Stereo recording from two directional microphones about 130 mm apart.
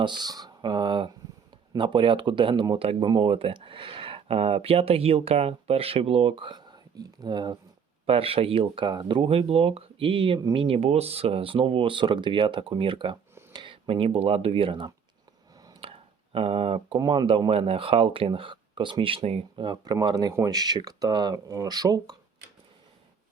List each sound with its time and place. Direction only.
0.0 s speech: 35° right (ahead or behind)
8.0 s speech: 45° right (ahead or behind)
15.8 s a sound: 45° right (ahead or behind)
17.0 s speech: 35° right (ahead or behind)
19.6 s speech: 30° right (ahead or behind)